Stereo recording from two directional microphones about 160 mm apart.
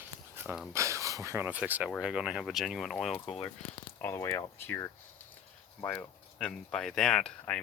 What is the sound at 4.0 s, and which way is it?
Speech, 15° left (ahead or behind).